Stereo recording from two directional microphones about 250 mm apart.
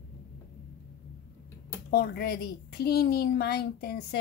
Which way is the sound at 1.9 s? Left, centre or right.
Left.